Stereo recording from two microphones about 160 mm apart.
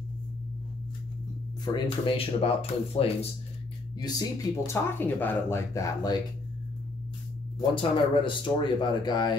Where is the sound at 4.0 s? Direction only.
25° left (ahead or behind).